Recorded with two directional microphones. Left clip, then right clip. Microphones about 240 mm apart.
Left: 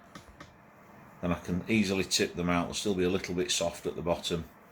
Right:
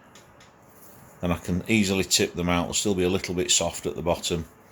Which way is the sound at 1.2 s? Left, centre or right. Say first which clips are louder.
Right 5 dB; right.